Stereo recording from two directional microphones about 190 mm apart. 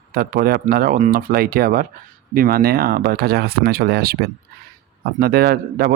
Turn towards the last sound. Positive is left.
turn(degrees=-50)  # may be behind; listen again after turning